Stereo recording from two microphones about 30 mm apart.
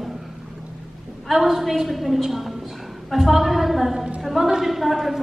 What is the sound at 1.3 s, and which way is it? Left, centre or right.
A woman's voice, centre.